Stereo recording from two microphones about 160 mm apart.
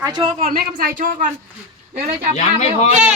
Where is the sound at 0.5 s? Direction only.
65° right (ahead or behind).